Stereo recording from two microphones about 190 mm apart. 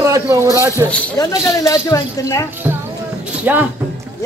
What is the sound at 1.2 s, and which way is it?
Speech, 15° left (ahead or behind).